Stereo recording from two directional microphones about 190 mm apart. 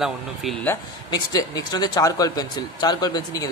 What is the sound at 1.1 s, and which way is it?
Speech, 20° left (ahead or behind).